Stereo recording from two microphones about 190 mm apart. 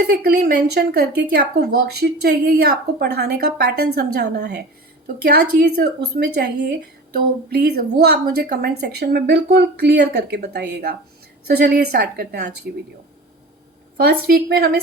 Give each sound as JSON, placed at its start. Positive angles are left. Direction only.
{"t": 0.1, "sound": "speech", "side_deg": -55}
{"t": 13.9, "sound": "speech", "side_deg": -55}